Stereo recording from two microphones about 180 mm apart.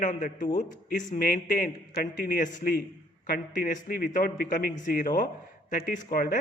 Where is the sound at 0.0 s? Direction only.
45° left (ahead or behind).